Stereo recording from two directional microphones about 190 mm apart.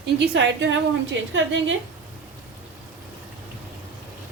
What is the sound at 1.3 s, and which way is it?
Speech, 80° right.